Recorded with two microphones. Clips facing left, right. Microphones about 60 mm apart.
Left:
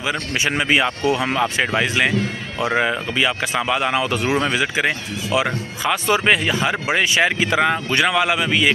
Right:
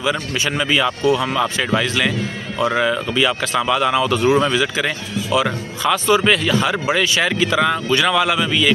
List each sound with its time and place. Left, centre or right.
0.3 s speech: left